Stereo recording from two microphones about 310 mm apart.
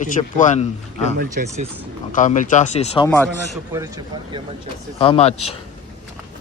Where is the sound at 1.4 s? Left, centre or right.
Right.